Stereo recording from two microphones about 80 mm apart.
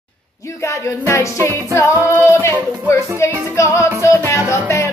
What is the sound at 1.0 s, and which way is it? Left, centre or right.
Music, left.